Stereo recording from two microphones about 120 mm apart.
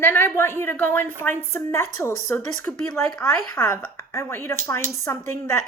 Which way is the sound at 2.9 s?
5° left (ahead or behind).